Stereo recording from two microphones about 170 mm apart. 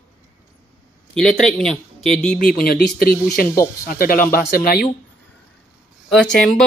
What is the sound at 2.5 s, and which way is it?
Speech, 60° left (ahead or behind).